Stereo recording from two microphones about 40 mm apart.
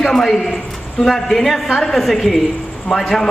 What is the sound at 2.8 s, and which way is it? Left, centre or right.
Speech, centre.